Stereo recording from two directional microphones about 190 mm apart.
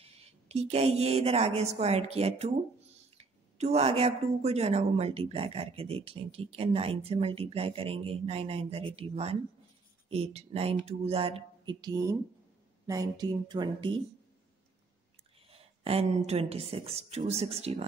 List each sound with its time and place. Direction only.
0.0 s a woman's voice: 30° right (ahead or behind)
15.5 s a woman's voice: 30° right (ahead or behind)